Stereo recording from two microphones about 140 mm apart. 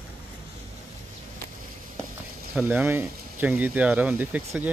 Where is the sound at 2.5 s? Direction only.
15° right (ahead or behind).